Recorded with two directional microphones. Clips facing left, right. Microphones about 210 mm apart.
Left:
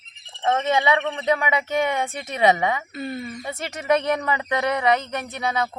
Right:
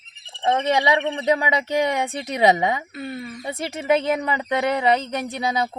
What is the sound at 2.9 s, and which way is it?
Speech, 5° right (ahead or behind).